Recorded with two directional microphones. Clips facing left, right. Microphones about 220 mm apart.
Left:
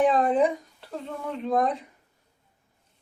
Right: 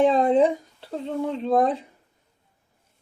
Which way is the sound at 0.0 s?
25° right (ahead or behind).